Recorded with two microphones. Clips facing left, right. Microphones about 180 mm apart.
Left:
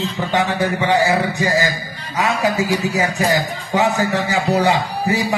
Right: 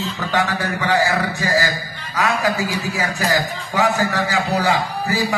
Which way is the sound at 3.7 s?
20° left (ahead or behind).